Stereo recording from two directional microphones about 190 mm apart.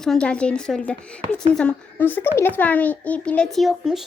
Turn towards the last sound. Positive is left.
turn(degrees=0)  # may be behind; listen again after turning